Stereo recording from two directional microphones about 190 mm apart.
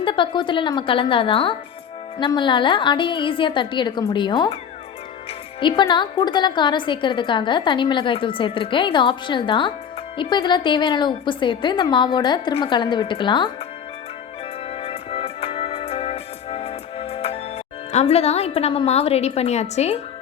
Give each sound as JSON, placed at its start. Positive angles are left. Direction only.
{"t": 0.0, "sound": "a woman's voice", "side_deg": 25}
{"t": 5.5, "sound": "a woman's voice", "side_deg": 25}
{"t": 14.7, "sound": "music", "side_deg": 30}
{"t": 17.9, "sound": "a woman's voice", "side_deg": 35}